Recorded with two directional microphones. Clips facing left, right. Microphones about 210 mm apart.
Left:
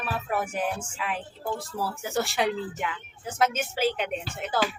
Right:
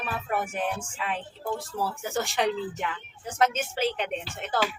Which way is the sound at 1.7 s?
Centre (ahead or behind).